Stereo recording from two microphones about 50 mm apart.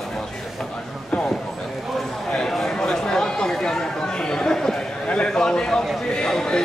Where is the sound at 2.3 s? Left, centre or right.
Centre.